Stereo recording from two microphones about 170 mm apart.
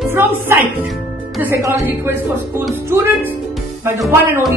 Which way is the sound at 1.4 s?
15° right (ahead or behind).